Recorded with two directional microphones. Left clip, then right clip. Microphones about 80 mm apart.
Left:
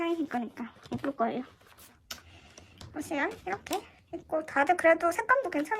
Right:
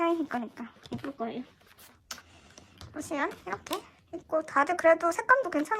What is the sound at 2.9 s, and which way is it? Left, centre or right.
Speech, right.